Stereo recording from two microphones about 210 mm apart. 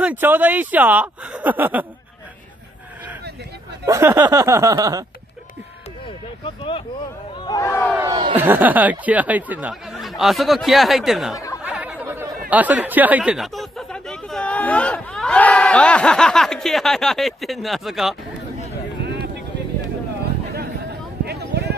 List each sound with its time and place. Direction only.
0.0 s speech: 10° right (ahead or behind)
3.8 s speech: 15° right (ahead or behind)
6.4 s speech: 25° left (ahead or behind)
7.9 s speech: 15° right (ahead or behind)
8.4 s speech: 10° right (ahead or behind)
11.6 s chatter: 5° right (ahead or behind)
12.4 s speech: 5° right (ahead or behind)
21.3 s a sound: 50° right (ahead or behind)